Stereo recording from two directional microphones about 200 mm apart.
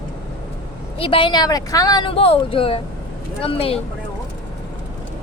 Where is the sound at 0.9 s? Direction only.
25° left (ahead or behind).